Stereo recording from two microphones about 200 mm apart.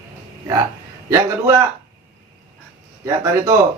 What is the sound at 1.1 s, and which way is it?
Speech, 15° right (ahead or behind).